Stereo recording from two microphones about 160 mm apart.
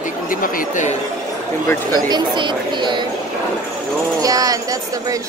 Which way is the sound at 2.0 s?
25° right (ahead or behind).